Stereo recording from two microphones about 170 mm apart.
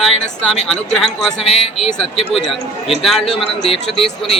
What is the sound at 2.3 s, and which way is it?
Speech, centre (ahead or behind).